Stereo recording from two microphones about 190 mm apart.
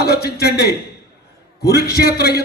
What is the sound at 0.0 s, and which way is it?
A man's voice, 55° left (ahead or behind).